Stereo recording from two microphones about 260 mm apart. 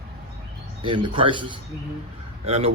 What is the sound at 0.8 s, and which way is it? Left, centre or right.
A man's voice, centre.